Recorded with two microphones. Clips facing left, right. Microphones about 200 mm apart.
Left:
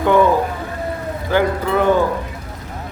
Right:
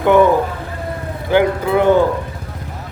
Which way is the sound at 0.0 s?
15° right (ahead or behind).